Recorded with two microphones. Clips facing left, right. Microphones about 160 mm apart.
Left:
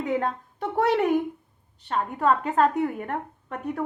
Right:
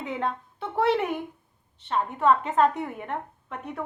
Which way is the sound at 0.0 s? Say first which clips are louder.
Left 4 dB; 40° left (ahead or behind).